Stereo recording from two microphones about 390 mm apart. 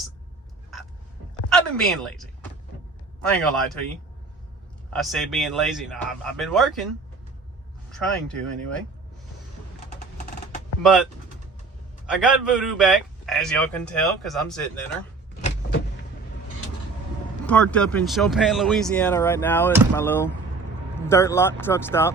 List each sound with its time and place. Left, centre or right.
1.5 s a man's voice: centre
4.9 s a man's voice: centre
10.8 s a man's voice: centre
15.4 s vehicle: centre
17.4 s a man's voice: centre